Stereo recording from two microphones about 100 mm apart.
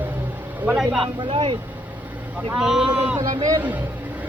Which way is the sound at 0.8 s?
5° right (ahead or behind).